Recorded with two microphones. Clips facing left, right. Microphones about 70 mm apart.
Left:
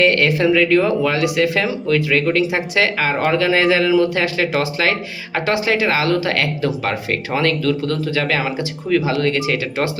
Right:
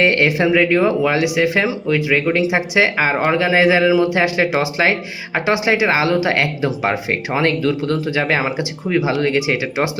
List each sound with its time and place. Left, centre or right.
0.0 s speech: centre